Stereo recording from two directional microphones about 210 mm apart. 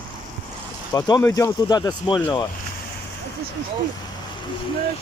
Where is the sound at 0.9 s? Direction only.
20° left (ahead or behind).